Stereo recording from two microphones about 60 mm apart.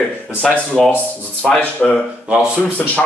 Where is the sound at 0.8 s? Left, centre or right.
Left.